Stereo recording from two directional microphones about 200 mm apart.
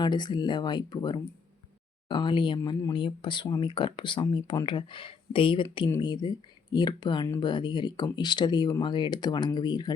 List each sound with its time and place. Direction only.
0.0 s speech: 20° left (ahead or behind)